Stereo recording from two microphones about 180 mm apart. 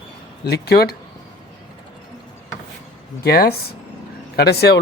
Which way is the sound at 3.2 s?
60° left (ahead or behind).